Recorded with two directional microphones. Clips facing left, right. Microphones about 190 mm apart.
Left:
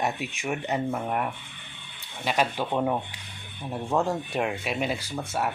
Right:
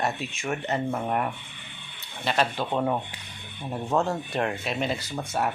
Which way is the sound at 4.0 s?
10° left (ahead or behind).